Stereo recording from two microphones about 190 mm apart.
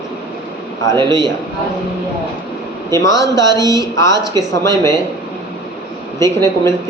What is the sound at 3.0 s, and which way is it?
Speech, 20° left (ahead or behind).